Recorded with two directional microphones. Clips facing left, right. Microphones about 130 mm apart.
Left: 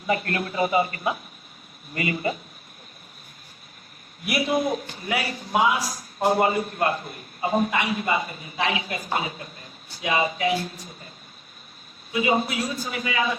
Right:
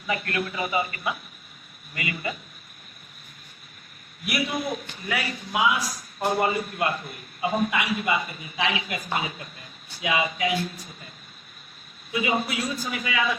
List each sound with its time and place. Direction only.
0.1 s a man's voice: 35° left (ahead or behind)
4.3 s a man's voice: 35° left (ahead or behind)
12.1 s a man's voice: 35° left (ahead or behind)